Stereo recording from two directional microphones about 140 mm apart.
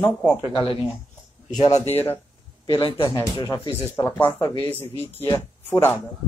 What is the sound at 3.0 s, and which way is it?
Speech, 20° left (ahead or behind).